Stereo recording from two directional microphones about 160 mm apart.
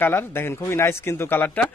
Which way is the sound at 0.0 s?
15° left (ahead or behind).